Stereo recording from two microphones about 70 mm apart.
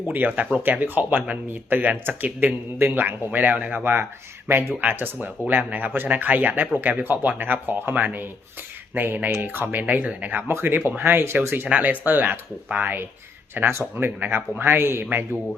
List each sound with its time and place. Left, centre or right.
0.1 s speech: right
10.5 s speech: right